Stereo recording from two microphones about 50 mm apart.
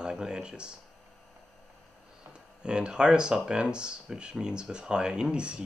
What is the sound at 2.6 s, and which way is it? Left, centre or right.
Speech, centre.